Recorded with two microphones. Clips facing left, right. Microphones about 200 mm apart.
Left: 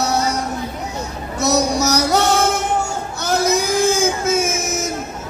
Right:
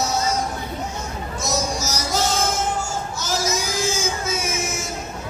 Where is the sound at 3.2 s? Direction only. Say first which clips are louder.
Left 8 dB; 60° left (ahead or behind).